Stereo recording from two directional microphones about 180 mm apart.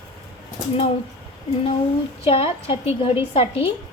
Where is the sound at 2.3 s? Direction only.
30° left (ahead or behind).